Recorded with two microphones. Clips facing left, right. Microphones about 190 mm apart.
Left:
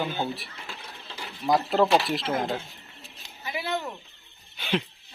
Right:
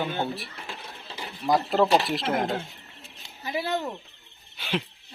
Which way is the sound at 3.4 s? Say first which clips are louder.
Right 2 dB; 35° right (ahead or behind).